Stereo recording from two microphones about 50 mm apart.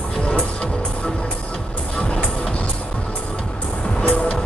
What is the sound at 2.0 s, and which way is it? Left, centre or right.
Music, left.